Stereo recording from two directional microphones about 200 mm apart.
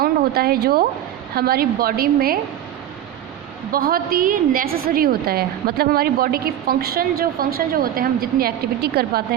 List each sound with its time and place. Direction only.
0.0 s a woman's voice: 50° right (ahead or behind)
3.7 s a woman's voice: 45° right (ahead or behind)